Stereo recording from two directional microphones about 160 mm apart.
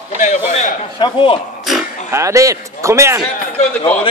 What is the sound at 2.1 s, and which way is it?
A man's voice, 20° right (ahead or behind).